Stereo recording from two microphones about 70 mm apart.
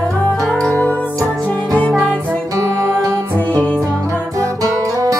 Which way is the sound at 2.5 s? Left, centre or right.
Right.